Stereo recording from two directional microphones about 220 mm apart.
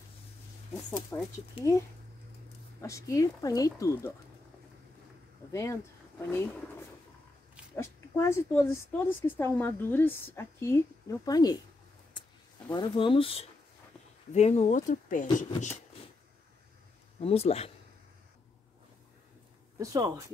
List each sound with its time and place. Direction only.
1.1 s speech: 15° left (ahead or behind)
5.5 s speech: 10° left (ahead or behind)
7.7 s speech: 10° left (ahead or behind)
12.1 s a sound: 20° left (ahead or behind)
14.3 s speech: 30° left (ahead or behind)
17.2 s speech: 25° left (ahead or behind)
19.8 s speech: 15° right (ahead or behind)